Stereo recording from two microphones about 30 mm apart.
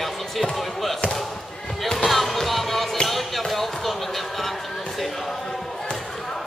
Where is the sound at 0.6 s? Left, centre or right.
Centre.